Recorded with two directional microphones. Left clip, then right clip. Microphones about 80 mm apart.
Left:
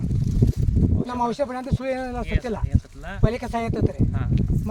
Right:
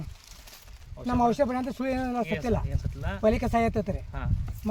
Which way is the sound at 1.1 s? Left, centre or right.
Left.